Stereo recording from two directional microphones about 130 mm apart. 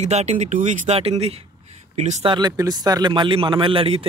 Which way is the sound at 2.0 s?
65° right (ahead or behind).